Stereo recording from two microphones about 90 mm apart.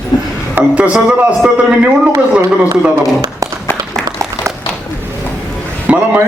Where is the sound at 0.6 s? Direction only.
25° right (ahead or behind).